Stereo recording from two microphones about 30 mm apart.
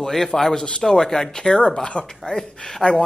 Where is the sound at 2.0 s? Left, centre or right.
Left.